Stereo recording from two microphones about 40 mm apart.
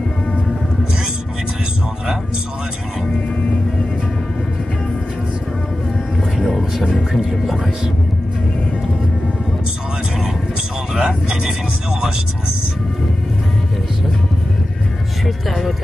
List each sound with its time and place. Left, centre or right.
7.1 s music: centre
11.0 s vehicle: right
15.2 s music: centre